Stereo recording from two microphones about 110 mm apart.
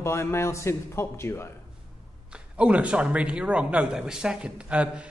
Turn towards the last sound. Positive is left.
turn(degrees=-10)  # may be behind; listen again after turning